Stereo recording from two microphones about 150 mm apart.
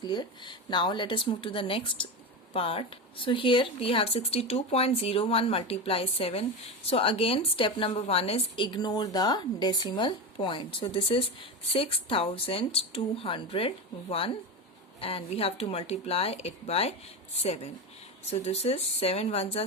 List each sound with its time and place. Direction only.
0.0 s a woman's voice: 30° left (ahead or behind)